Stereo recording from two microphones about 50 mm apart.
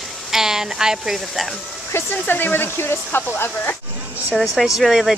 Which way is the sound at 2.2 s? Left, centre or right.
Left.